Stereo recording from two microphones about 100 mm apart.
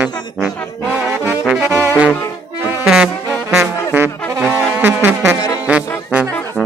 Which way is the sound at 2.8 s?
5° right (ahead or behind).